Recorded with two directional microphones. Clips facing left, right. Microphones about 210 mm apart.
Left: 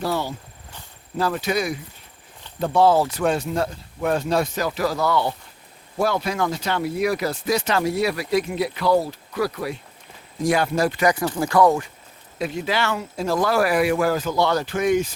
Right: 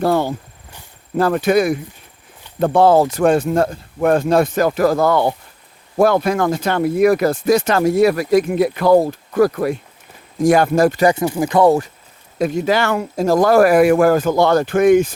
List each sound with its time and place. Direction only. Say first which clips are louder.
0.0 s speech: right 8 dB; 55° right (ahead or behind)
11.0 s speech: right 5 dB; 25° right (ahead or behind)
12.4 s speech: right 7 dB; 45° right (ahead or behind)